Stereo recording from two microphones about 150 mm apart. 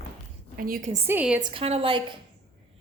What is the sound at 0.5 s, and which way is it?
Speech, 75° right (ahead or behind).